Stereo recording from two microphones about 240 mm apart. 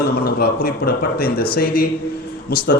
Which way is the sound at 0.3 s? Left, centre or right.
Left.